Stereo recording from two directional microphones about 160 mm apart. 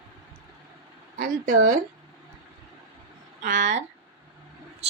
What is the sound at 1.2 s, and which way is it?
Speech, 55° right (ahead or behind).